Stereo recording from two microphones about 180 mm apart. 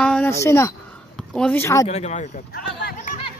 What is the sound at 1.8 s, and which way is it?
Speech, 40° left (ahead or behind).